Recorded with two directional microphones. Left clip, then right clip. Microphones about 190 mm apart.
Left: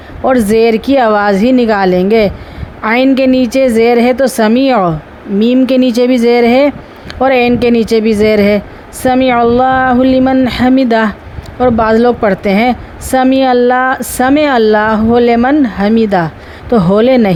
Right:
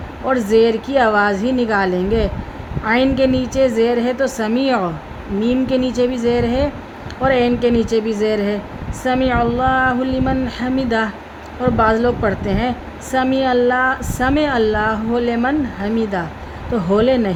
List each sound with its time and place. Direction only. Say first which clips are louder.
0.3 s a woman's voice: left 6 dB; 45° left (ahead or behind)